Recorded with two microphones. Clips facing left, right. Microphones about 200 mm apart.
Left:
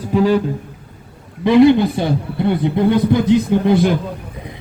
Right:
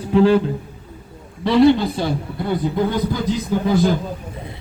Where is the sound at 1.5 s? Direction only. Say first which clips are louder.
Left 3 dB; 20° left (ahead or behind).